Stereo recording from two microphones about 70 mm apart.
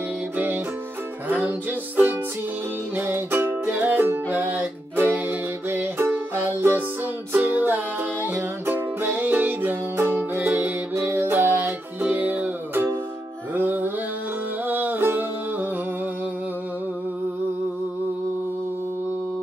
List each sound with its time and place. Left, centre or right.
3.0 s music: right